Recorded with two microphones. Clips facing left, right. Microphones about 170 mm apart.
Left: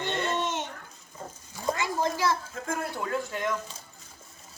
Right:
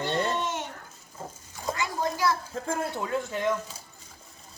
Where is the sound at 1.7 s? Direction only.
25° left (ahead or behind).